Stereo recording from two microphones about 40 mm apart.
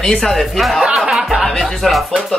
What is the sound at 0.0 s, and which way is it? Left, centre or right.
Speech, centre.